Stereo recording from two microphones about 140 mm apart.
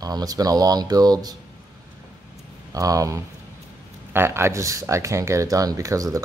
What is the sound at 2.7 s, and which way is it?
Speech, 25° right (ahead or behind).